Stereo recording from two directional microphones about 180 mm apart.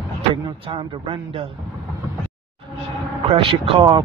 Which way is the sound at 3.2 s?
30° right (ahead or behind).